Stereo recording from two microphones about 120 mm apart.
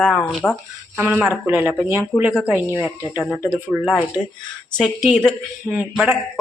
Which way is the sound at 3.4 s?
10° right (ahead or behind).